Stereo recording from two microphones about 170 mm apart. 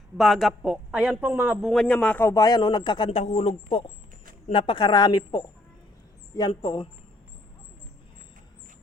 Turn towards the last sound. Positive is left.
turn(degrees=25)  # may be behind; listen again after turning